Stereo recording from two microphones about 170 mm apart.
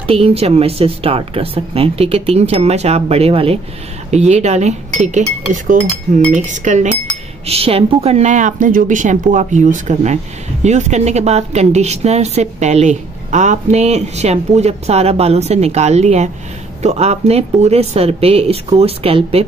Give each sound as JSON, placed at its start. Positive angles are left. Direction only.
{"t": 0.0, "sound": "a woman's voice", "side_deg": -35}